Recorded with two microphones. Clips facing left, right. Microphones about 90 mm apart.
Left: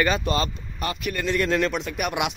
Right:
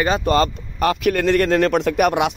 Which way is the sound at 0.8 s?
70° right (ahead or behind).